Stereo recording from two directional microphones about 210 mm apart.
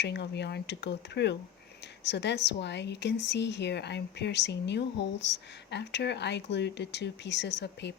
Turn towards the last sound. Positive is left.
turn(degrees=55)  # may be behind; listen again after turning